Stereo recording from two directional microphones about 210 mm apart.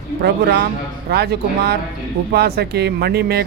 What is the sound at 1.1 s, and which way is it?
Speech, 50° right (ahead or behind).